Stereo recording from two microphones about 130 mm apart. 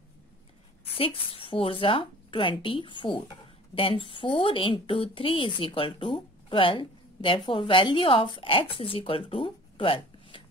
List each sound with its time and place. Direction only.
0.8 s a woman's voice: 45° left (ahead or behind)